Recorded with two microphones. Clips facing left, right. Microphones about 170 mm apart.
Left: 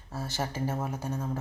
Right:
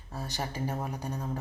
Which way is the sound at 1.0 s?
15° right (ahead or behind).